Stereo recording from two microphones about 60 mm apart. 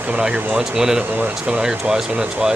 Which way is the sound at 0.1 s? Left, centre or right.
Centre.